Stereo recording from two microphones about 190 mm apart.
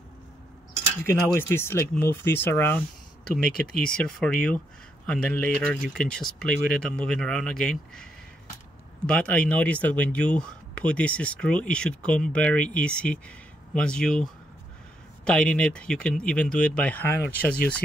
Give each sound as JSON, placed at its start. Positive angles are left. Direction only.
{"t": 1.0, "sound": "speech", "side_deg": 15}